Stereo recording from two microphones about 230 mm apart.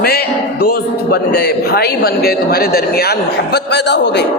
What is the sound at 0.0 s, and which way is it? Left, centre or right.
A man's voice, left.